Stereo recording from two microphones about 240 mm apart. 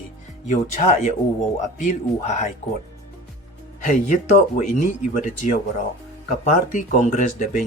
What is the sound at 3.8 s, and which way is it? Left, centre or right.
Speech, left.